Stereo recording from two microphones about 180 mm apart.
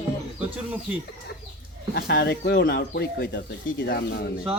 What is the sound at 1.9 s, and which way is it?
Speech, 65° left (ahead or behind).